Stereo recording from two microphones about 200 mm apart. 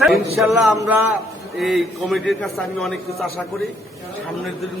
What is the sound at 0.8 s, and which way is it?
Speech, 10° right (ahead or behind).